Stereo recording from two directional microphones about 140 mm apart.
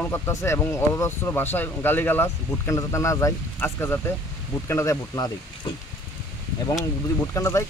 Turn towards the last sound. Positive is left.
turn(degrees=20)  # may be behind; listen again after turning